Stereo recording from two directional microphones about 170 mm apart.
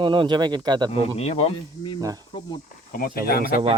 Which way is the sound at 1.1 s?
40° left (ahead or behind).